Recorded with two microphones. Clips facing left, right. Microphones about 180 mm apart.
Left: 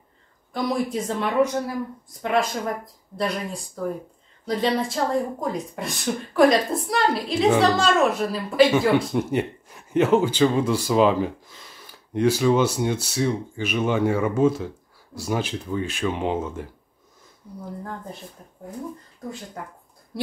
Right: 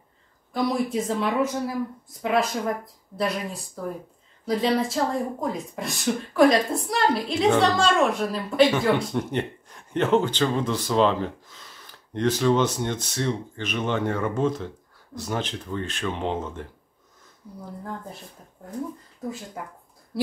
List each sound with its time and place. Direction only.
0.5 s speech: centre (ahead or behind)